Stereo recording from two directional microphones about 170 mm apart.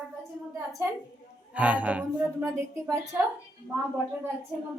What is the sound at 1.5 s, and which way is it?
A woman's voice, 10° right (ahead or behind).